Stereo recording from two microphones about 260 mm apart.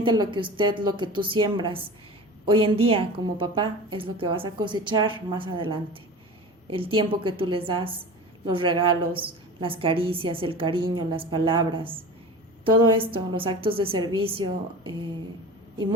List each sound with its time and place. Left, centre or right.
0.0 s a woman's voice: centre